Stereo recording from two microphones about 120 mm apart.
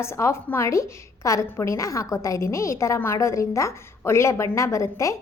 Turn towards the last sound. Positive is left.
turn(degrees=25)  # may be behind; listen again after turning